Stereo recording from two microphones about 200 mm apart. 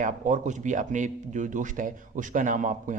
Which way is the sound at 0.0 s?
40° right (ahead or behind).